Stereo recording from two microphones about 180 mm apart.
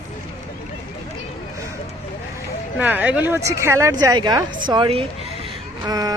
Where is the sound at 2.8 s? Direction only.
10° right (ahead or behind).